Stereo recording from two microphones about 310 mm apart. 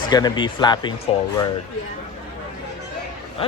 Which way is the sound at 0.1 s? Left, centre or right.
Centre.